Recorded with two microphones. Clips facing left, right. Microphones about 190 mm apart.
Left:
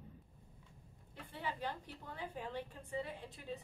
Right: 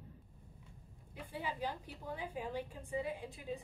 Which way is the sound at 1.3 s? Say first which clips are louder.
Right 2 dB; 10° right (ahead or behind).